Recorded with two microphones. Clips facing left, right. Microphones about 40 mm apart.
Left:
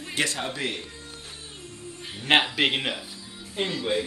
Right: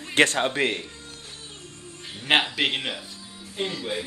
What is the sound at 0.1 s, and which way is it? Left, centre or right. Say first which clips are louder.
Speech: right 7 dB; right.